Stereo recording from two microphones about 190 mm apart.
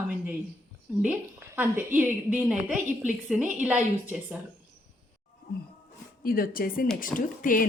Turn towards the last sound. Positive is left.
turn(degrees=45)  # may be behind; listen again after turning